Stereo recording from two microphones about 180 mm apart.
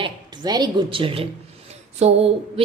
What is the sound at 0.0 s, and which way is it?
A woman's voice, 25° right (ahead or behind).